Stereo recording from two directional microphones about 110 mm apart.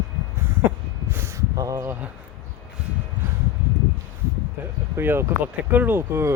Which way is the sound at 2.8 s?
10° right (ahead or behind).